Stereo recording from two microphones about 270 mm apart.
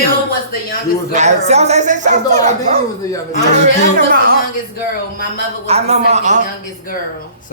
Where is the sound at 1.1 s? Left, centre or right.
Right.